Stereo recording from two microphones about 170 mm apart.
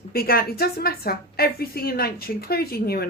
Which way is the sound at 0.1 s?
60° left (ahead or behind).